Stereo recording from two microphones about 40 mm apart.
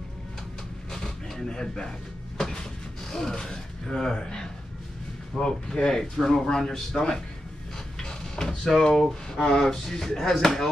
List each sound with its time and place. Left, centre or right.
0.9 s cupboard open or close: centre
5.4 s speech: centre
8.0 s a sound: centre
8.6 s speech: centre